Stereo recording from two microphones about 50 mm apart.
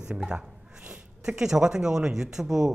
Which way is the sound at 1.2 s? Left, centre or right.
Centre.